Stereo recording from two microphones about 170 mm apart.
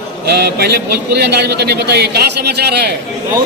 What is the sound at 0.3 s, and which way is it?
A man's voice, 75° right (ahead or behind).